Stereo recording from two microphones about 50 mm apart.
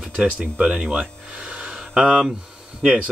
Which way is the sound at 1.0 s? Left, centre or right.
Right.